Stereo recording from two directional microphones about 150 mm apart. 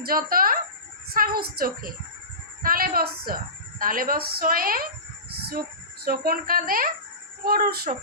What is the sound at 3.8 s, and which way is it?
A woman's voice, 70° right (ahead or behind).